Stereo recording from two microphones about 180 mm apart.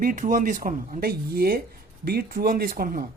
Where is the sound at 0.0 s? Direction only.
45° right (ahead or behind).